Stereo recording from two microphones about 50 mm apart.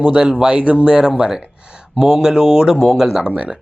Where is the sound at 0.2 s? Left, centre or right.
Centre.